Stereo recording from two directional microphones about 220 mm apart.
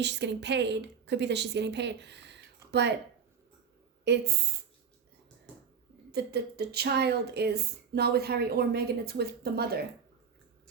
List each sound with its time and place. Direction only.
0.0 s a woman's voice: 55° right (ahead or behind)
4.0 s a woman's voice: 50° right (ahead or behind)
6.1 s a woman's voice: 45° right (ahead or behind)